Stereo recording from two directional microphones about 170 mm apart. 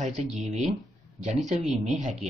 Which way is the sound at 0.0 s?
40° right (ahead or behind).